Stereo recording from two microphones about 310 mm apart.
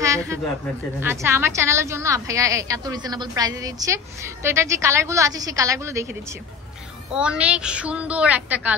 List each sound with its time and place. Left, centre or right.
0.0 s a sound: centre
1.0 s a woman's voice: centre
7.1 s a woman's voice: centre